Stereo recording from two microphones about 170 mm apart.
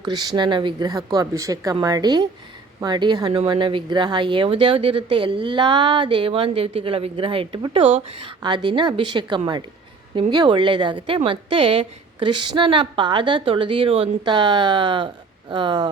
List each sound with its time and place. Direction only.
0.0 s speech: 25° right (ahead or behind)